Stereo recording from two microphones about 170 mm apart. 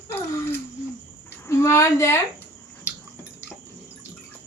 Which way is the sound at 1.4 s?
15° left (ahead or behind).